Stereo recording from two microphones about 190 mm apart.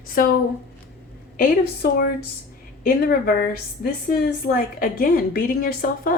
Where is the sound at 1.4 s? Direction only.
50° left (ahead or behind).